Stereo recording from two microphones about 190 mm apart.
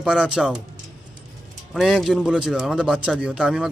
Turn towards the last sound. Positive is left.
turn(degrees=-5)  # may be behind; listen again after turning